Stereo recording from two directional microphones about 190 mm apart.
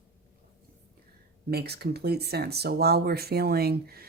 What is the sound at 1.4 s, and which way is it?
Speech, 55° right (ahead or behind).